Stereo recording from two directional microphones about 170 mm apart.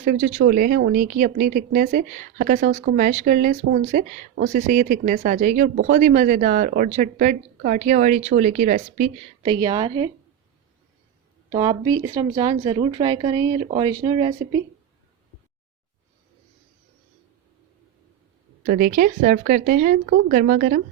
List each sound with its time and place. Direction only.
0.0 s a woman's voice: 55° right (ahead or behind)
0.4 s a woman's voice: 60° right (ahead or behind)
9.5 s speech: 25° right (ahead or behind)
11.5 s speech: 25° right (ahead or behind)
18.7 s a woman's voice: 55° right (ahead or behind)
20.1 s a woman's voice: 65° right (ahead or behind)